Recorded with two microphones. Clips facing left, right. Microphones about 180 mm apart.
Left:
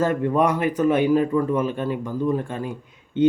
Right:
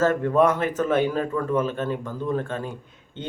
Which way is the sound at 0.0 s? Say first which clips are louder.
Right 1 dB; 15° left (ahead or behind).